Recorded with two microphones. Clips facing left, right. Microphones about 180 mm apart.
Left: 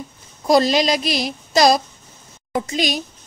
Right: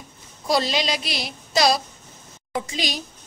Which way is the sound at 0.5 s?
45° left (ahead or behind).